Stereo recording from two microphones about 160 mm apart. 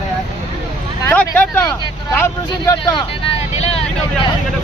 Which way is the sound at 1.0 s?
10° left (ahead or behind).